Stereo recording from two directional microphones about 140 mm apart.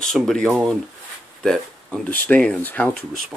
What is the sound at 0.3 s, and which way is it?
Speech, 5° left (ahead or behind).